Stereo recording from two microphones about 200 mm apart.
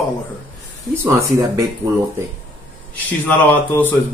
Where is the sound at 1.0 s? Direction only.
10° right (ahead or behind).